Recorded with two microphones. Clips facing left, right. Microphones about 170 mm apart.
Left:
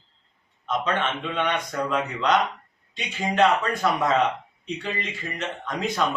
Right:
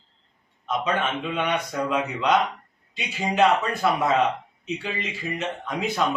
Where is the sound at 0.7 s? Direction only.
5° right (ahead or behind).